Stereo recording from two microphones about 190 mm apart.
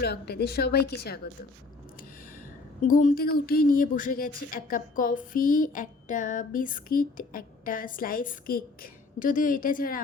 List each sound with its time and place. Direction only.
0.0 s a woman's voice: 55° left (ahead or behind)
2.8 s a woman's voice: 45° left (ahead or behind)